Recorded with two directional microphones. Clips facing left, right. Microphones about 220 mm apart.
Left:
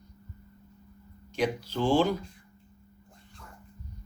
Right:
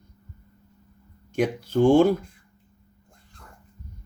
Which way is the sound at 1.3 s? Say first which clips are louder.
Right 6 dB; 50° right (ahead or behind).